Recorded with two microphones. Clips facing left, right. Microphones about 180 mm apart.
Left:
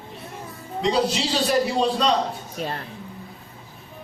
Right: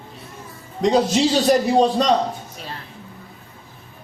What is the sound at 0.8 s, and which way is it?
A man's voice, 45° right (ahead or behind).